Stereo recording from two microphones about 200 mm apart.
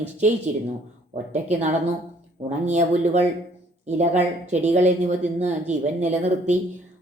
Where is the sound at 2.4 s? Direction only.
35° right (ahead or behind).